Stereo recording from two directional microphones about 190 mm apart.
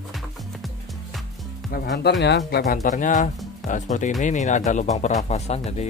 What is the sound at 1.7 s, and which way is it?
Speech, 60° left (ahead or behind).